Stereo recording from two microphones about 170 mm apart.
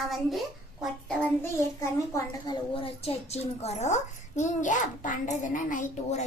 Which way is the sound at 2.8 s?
35° left (ahead or behind).